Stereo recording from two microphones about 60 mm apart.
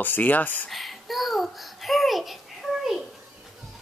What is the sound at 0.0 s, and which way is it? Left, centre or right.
Speech, left.